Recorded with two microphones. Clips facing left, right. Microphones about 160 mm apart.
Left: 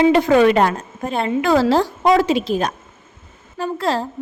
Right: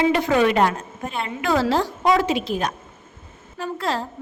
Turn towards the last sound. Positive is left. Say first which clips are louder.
# left 5 dB
turn(degrees=35)  # may be behind; listen again after turning